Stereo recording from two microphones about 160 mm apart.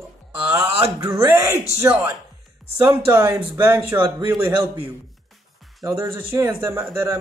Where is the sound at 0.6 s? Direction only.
35° right (ahead or behind).